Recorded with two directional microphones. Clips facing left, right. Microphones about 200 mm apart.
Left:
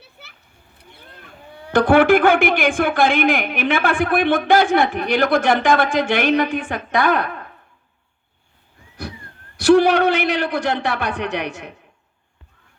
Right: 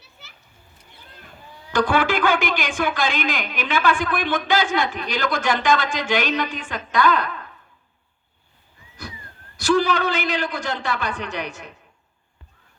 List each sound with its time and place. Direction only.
0.0 s children playing: 60° left (ahead or behind)
0.8 s a man's voice: 60° left (ahead or behind)
9.6 s a man's voice: 60° left (ahead or behind)